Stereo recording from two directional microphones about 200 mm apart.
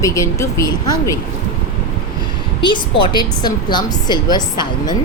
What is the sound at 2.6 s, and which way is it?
A woman's voice, 25° left (ahead or behind).